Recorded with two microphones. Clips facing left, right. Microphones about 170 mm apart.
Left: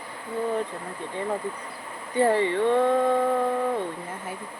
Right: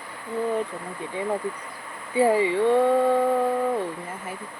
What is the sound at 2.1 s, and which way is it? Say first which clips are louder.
Speech: right 2 dB; 10° right (ahead or behind).